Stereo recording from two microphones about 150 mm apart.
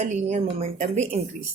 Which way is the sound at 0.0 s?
50° right (ahead or behind).